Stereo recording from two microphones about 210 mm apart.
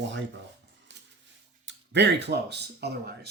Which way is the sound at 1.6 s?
55° right (ahead or behind).